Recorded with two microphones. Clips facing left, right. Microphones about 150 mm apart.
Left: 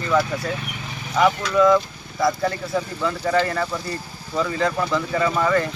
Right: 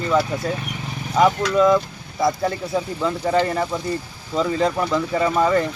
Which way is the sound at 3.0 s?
25° right (ahead or behind).